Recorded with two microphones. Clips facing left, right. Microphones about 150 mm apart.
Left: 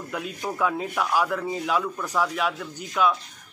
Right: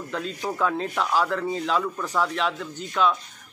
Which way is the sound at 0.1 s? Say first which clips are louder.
Right 1 dB; 10° left (ahead or behind).